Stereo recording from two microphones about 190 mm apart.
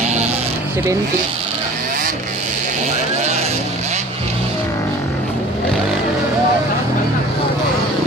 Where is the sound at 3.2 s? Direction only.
35° right (ahead or behind).